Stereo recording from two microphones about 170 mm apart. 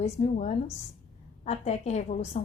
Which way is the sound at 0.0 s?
45° left (ahead or behind).